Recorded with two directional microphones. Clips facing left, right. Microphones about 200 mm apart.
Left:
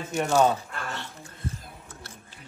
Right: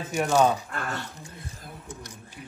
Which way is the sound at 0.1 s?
Centre (ahead or behind).